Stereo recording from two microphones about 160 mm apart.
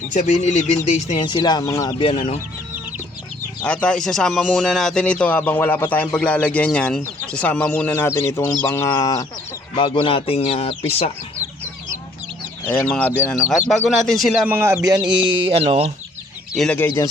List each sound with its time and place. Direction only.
0.1 s speech: 45° left (ahead or behind)
1.2 s speech: 30° left (ahead or behind)
3.6 s speech: 5° left (ahead or behind)
9.7 s speech: 30° left (ahead or behind)
12.8 s speech: 10° left (ahead or behind)
14.6 s speech: 20° right (ahead or behind); by 15.9 s 40° right (ahead or behind)
16.6 s speech: 10° left (ahead or behind)